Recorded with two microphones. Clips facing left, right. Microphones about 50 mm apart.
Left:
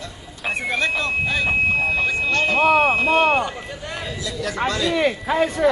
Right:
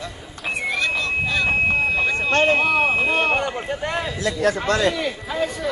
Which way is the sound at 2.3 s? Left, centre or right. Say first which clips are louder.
Right 5 dB; right.